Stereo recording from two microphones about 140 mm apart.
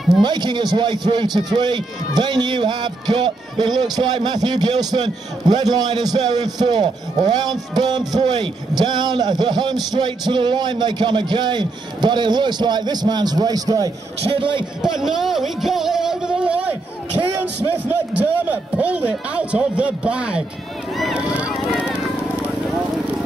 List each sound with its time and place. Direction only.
0.2 s a man's voice: 30° right (ahead or behind)
14.8 s speech: 5° right (ahead or behind)
18.5 s a man's voice: 10° right (ahead or behind)